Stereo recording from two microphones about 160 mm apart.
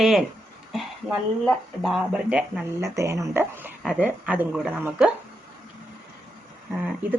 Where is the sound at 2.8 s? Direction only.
20° right (ahead or behind).